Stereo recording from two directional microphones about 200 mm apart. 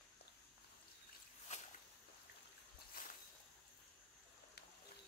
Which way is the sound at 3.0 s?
45° left (ahead or behind).